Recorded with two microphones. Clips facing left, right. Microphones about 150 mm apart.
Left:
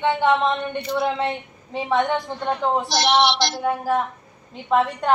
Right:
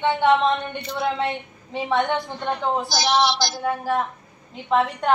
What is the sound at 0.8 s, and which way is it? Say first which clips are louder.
Speech: left 5 dB; 10° left (ahead or behind).